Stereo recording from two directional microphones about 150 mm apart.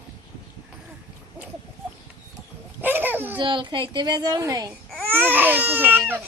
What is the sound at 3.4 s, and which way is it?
A child's voice, 35° right (ahead or behind).